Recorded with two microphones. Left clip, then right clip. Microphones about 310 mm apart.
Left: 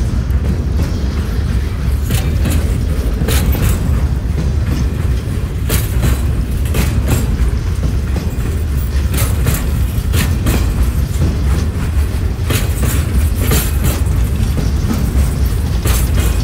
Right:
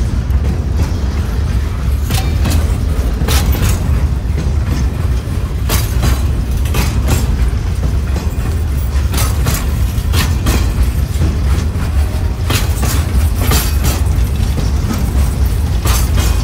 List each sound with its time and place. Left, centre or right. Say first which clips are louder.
3.3 s vehicle: right 2 dB; centre
10.1 s vehicle: right 1 dB; centre
12.4 s a sound: right 2 dB; centre
13.4 s train: right 2 dB; centre